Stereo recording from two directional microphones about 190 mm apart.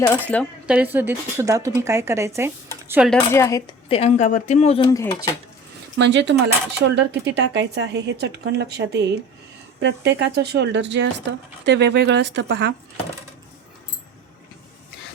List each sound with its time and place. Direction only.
0.0 s speech: 10° left (ahead or behind)
0.7 s speech: 10° right (ahead or behind)
3.1 s speech: 10° left (ahead or behind)
3.8 s speech: 30° left (ahead or behind)
4.9 s speech: 15° left (ahead or behind)
6.0 s speech: 70° right (ahead or behind)